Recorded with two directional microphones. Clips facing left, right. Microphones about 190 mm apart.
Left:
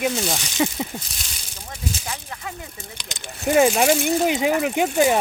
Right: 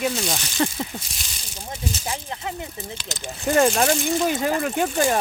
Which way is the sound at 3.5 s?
5° left (ahead or behind).